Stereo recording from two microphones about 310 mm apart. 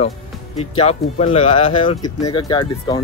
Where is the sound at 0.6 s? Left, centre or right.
Centre.